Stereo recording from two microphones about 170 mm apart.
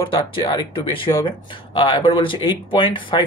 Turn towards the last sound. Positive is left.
turn(degrees=30)  # may be behind; listen again after turning